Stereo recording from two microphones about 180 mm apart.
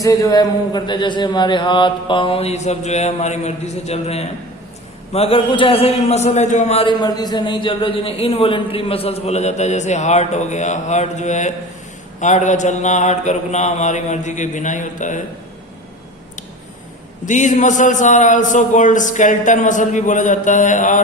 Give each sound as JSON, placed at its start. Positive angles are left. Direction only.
{"t": 0.0, "sound": "a man's voice", "side_deg": 20}
{"t": 17.2, "sound": "a man's voice", "side_deg": 45}